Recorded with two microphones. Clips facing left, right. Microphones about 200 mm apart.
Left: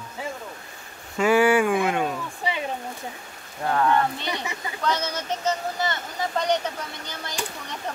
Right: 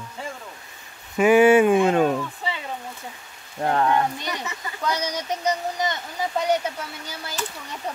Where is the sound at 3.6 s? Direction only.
25° right (ahead or behind).